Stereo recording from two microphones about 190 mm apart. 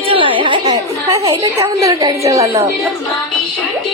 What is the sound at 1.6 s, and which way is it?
A woman's voice, 15° right (ahead or behind).